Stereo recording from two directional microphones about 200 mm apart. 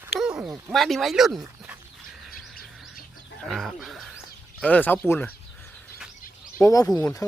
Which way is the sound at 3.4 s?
Centre (ahead or behind).